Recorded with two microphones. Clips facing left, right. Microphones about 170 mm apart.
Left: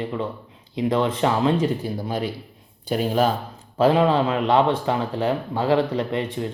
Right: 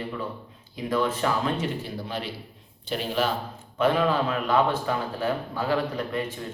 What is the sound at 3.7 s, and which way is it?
A man's voice, 30° left (ahead or behind).